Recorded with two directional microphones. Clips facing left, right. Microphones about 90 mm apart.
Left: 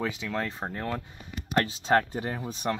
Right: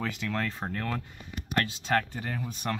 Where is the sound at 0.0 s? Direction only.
10° left (ahead or behind).